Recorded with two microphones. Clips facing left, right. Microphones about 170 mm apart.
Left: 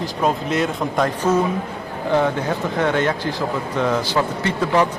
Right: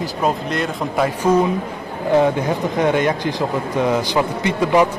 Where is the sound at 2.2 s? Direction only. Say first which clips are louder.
Right 3 dB; 15° right (ahead or behind).